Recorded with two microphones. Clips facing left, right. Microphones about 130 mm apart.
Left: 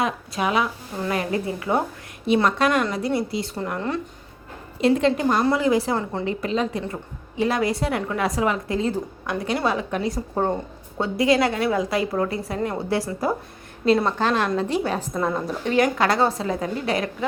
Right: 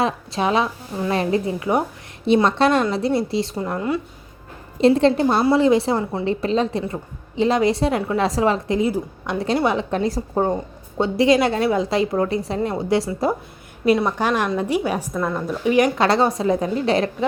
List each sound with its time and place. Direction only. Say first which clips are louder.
0.0 s a woman's voice: right 3 dB; 30° right (ahead or behind)
3.8 s a woman's voice: right 4 dB; 10° right (ahead or behind)
4.8 s a woman's voice: right 4 dB; 35° right (ahead or behind)
14.0 s a woman's voice: right 1 dB; 15° right (ahead or behind)
15.1 s a woman's voice: right 1 dB; 5° left (ahead or behind)
15.6 s a woman's voice: right 3 dB; 15° right (ahead or behind)